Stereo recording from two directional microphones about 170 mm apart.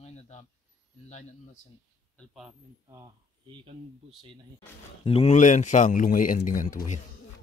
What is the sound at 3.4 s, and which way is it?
Speech, 30° right (ahead or behind).